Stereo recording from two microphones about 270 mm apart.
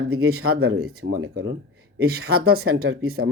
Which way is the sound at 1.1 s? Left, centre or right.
Right.